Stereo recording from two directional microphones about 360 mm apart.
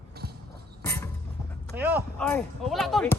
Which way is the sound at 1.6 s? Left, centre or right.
Centre.